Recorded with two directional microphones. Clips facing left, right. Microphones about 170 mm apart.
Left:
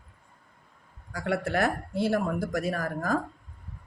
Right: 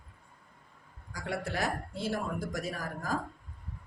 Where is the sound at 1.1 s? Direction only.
60° left (ahead or behind).